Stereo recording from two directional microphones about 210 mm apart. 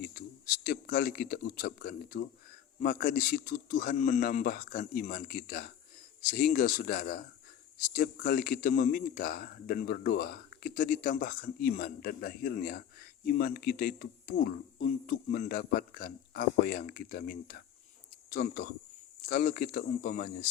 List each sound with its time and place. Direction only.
0.0 s a man's voice: 45° left (ahead or behind)